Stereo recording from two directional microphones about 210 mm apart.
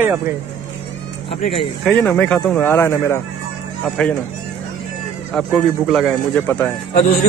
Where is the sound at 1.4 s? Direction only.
30° left (ahead or behind).